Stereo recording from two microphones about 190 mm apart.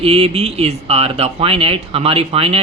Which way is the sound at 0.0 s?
30° right (ahead or behind).